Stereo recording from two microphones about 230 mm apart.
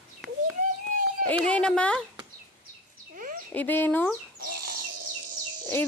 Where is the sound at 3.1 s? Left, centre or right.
Right.